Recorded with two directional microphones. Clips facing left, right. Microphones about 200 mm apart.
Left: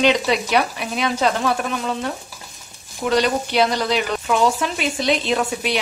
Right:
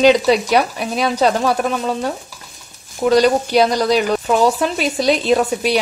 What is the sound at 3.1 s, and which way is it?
A woman's voice, 40° right (ahead or behind).